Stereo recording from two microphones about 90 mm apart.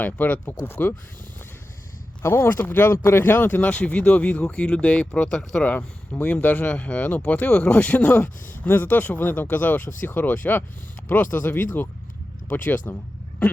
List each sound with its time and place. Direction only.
0.0 s speech: 20° left (ahead or behind)
2.2 s speech: 25° left (ahead or behind)